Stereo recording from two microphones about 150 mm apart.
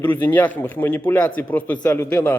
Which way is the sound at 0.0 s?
15° left (ahead or behind).